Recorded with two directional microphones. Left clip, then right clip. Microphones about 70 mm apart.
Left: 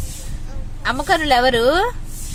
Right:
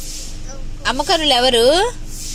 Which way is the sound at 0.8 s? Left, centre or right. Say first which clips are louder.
Right 2 dB; left.